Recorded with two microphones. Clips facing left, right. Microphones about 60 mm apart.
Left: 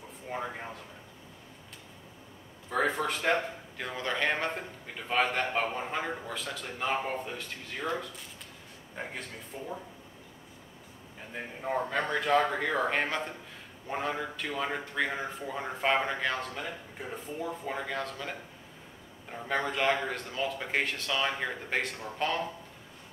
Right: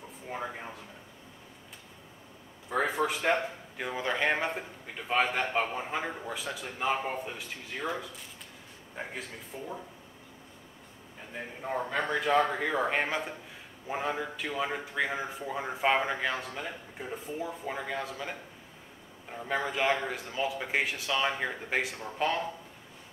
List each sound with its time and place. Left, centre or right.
0.3 s a man's voice: centre
2.7 s a man's voice: centre
11.3 s a man's voice: centre
19.3 s a man's voice: centre